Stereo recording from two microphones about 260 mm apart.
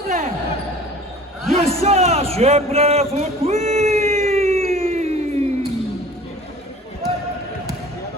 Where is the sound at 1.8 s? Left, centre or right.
Right.